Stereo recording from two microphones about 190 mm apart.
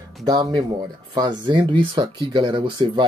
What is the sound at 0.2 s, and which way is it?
Speech, 20° right (ahead or behind).